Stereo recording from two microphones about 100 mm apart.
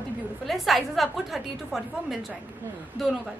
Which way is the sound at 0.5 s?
Centre (ahead or behind).